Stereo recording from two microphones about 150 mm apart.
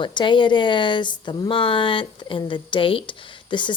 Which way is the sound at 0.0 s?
30° left (ahead or behind).